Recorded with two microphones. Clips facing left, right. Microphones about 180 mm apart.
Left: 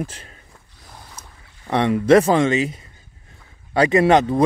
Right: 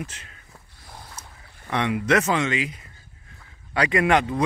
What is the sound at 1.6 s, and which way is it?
Speech, 35° left (ahead or behind).